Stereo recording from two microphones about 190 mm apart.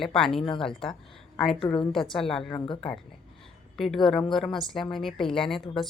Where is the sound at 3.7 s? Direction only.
Centre (ahead or behind).